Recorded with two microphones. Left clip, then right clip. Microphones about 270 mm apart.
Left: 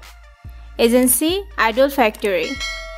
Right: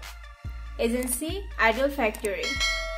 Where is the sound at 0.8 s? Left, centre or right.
Left.